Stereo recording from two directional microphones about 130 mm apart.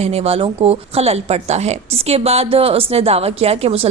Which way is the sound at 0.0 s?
50° right (ahead or behind).